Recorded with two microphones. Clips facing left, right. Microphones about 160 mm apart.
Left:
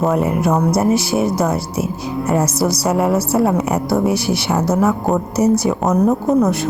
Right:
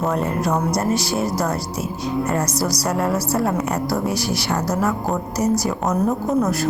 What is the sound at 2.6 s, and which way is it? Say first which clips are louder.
Speech: left 5 dB; centre (ahead or behind).